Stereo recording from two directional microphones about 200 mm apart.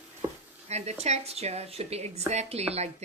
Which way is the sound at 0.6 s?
35° right (ahead or behind).